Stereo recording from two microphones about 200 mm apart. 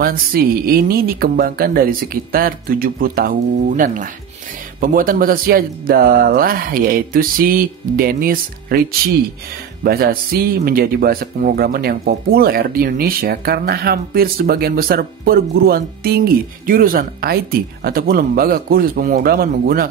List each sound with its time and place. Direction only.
0.0 s speech: 45° right (ahead or behind)
9.8 s speech: 50° right (ahead or behind)